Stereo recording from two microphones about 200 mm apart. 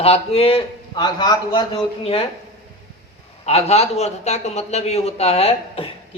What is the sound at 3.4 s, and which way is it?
A man's voice, 30° left (ahead or behind).